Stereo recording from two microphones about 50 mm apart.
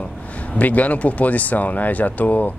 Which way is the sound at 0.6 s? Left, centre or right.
Left.